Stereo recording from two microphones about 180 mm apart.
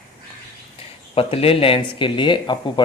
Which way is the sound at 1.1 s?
30° left (ahead or behind).